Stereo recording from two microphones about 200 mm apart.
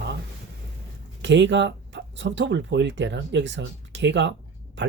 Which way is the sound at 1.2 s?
60° right (ahead or behind).